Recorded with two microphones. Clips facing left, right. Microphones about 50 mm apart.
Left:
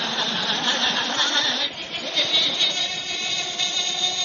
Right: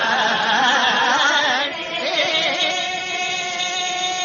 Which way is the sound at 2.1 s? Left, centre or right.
Right.